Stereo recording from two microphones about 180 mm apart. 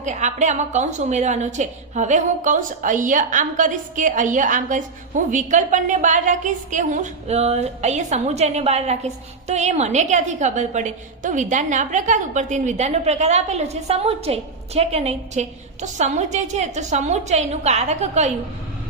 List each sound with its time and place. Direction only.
0.0 s a woman's voice: 40° right (ahead or behind)